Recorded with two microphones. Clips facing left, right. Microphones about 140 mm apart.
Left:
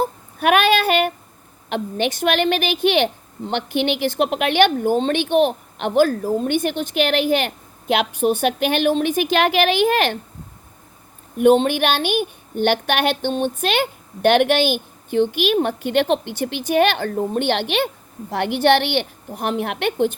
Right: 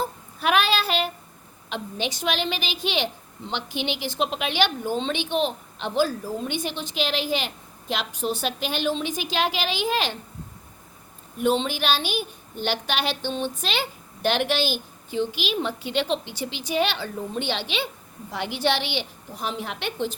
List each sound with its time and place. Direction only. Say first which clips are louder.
0.0 s child singing: left 6 dB; 60° left (ahead or behind)
1.7 s a woman's voice: left 8 dB; 55° left (ahead or behind)
11.3 s a woman's voice: left 9 dB; 55° left (ahead or behind)